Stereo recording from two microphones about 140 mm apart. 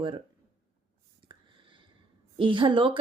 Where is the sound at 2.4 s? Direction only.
35° right (ahead or behind).